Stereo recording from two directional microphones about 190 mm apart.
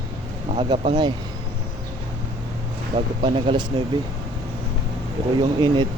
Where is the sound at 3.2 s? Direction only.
25° right (ahead or behind).